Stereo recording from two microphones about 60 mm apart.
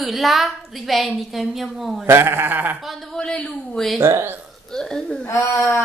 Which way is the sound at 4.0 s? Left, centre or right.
Right.